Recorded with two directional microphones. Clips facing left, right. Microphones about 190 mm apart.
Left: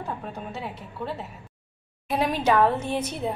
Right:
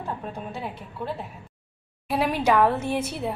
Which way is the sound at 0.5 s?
5° left (ahead or behind).